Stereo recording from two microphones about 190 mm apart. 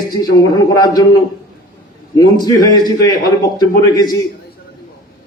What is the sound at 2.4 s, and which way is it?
A man's voice, 20° left (ahead or behind).